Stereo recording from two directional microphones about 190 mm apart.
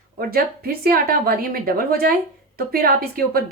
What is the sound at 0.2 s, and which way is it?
A woman's voice, 50° right (ahead or behind).